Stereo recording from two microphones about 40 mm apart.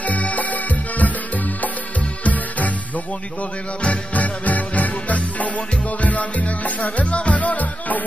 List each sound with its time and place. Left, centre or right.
0.0 s music: left
3.8 s music: left